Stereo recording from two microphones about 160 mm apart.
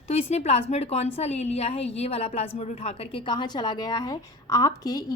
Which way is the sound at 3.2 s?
30° left (ahead or behind).